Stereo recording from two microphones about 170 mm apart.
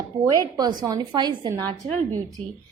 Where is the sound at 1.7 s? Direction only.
40° right (ahead or behind).